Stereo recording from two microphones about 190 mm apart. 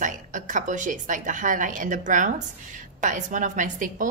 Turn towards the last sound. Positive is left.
turn(degrees=-45)  # may be behind; listen again after turning